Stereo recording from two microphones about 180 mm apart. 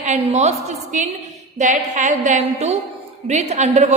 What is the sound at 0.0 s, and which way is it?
A woman's voice, 40° right (ahead or behind).